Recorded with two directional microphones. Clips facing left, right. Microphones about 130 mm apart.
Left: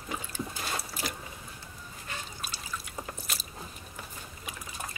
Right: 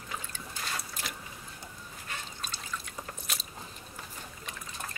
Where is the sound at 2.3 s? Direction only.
10° left (ahead or behind).